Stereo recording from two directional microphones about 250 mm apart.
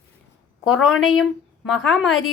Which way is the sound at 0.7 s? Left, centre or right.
Left.